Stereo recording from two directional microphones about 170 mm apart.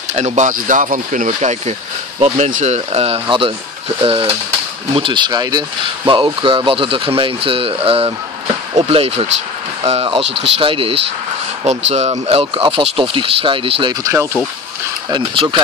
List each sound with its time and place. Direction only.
0.1 s speech: 45° right (ahead or behind)
15.0 s speech: 25° right (ahead or behind)